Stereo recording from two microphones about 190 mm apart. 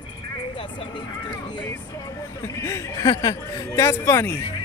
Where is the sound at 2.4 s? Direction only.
15° left (ahead or behind).